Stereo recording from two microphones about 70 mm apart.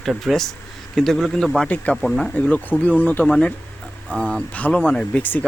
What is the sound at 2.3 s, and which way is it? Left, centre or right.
Speech, left.